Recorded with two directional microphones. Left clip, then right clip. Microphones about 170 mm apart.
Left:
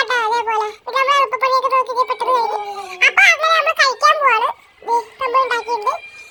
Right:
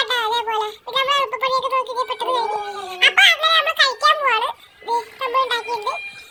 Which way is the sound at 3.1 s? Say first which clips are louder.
Left 2 dB; 15° left (ahead or behind).